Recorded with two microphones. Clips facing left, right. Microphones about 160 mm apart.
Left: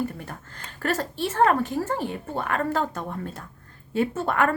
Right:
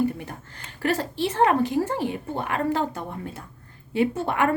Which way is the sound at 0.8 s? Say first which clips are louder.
Right 2 dB; 15° right (ahead or behind).